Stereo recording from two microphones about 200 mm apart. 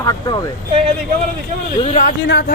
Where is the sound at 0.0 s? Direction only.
20° left (ahead or behind).